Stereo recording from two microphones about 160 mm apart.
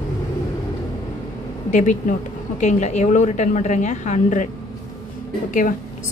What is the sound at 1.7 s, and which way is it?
A woman's voice, 50° left (ahead or behind).